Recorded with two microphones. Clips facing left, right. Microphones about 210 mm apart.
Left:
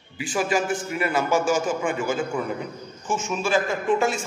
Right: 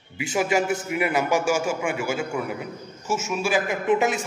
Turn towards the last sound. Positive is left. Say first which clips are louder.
# right 1 dB
turn(degrees=-20)  # may be behind; listen again after turning